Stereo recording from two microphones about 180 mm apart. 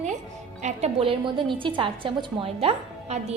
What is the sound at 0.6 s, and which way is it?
A woman's voice, 35° right (ahead or behind).